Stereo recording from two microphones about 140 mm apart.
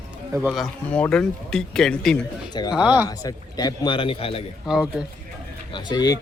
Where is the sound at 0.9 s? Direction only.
5° left (ahead or behind).